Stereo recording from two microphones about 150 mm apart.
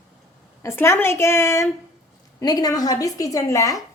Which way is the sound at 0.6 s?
15° left (ahead or behind).